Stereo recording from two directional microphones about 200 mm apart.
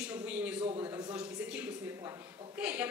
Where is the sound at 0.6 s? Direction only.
30° right (ahead or behind).